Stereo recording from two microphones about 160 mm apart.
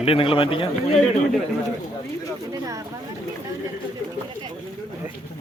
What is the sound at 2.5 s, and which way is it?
Speech, 20° right (ahead or behind).